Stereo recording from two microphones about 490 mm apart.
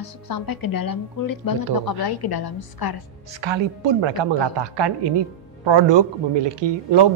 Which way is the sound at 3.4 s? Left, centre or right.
Right.